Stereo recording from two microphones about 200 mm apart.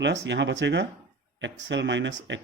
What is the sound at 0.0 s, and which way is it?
Speech, 60° right (ahead or behind).